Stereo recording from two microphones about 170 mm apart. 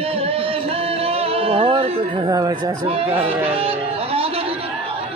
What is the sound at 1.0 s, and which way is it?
Speech, 35° right (ahead or behind).